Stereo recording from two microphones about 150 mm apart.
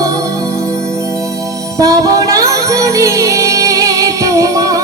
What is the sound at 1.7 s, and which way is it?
Music, 20° right (ahead or behind).